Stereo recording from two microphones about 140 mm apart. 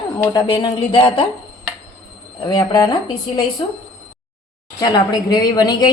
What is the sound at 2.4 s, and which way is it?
A woman's voice, 35° left (ahead or behind).